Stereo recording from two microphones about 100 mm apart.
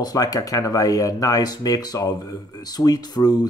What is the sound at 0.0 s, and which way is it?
Speech, 40° left (ahead or behind).